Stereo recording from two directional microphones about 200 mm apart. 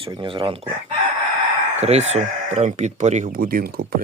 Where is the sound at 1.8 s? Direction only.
35° right (ahead or behind).